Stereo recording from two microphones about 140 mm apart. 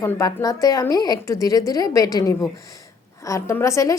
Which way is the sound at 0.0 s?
25° left (ahead or behind).